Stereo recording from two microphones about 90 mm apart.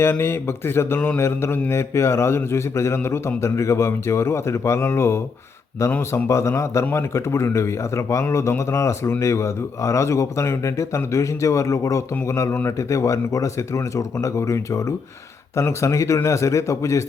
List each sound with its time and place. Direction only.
0.0 s speech: 25° left (ahead or behind)